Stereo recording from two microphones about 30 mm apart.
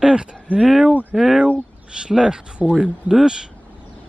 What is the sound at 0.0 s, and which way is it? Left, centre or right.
Speech, right.